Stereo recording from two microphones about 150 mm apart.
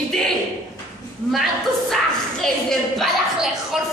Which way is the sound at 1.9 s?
Centre (ahead or behind).